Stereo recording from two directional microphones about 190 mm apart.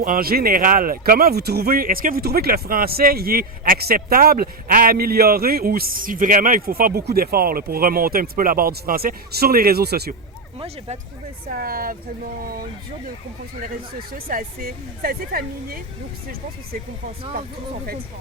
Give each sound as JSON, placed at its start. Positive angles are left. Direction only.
{"t": 0.0, "sound": "speech", "side_deg": -50}
{"t": 11.4, "sound": "speech", "side_deg": -50}
{"t": 14.1, "sound": "speech", "side_deg": -50}